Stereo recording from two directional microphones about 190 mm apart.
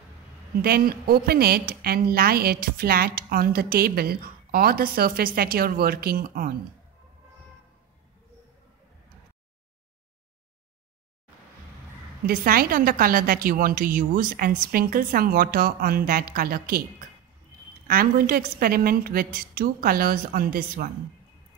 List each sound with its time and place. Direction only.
0.6 s a woman's voice: 50° right (ahead or behind)
12.3 s a woman's voice: 50° right (ahead or behind)
17.8 s a woman's voice: 50° right (ahead or behind)